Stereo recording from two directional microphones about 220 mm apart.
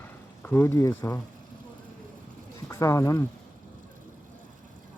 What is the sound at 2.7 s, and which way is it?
Speech, 15° left (ahead or behind).